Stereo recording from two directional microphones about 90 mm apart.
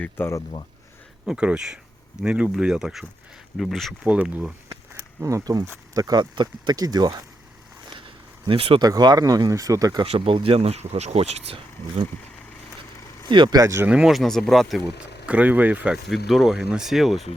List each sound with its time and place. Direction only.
0.2 s speech: 25° left (ahead or behind)
1.2 s speech: 10° right (ahead or behind)
4.0 s speech: 15° right (ahead or behind)
5.2 s speech: 40° right (ahead or behind)
7.9 s a sound: 70° right (ahead or behind); by 8.8 s 90° right
8.8 s speech: 50° right (ahead or behind)
10.0 s speech: 65° right (ahead or behind); by 12.0 s 90° right
13.2 s speech: 60° right (ahead or behind)
13.6 s speech: 35° right (ahead or behind)
13.8 s speech: 10° right (ahead or behind)
15.3 s speech: 15° right (ahead or behind)
16.0 s speech: centre (ahead or behind)